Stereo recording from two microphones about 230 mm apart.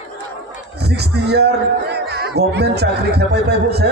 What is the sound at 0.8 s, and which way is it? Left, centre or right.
A man's voice, right.